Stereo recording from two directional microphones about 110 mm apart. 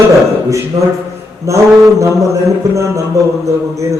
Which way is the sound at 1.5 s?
30° right (ahead or behind).